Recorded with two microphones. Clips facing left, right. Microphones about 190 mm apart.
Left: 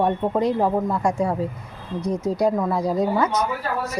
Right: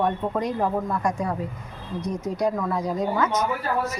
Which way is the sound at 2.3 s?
30° left (ahead or behind).